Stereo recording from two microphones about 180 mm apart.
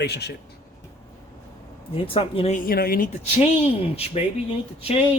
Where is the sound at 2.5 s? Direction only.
55° left (ahead or behind).